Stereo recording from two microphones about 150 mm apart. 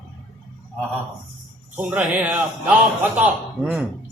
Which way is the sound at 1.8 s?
10° right (ahead or behind).